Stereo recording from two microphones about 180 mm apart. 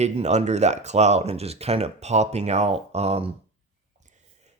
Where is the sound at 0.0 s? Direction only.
40° right (ahead or behind).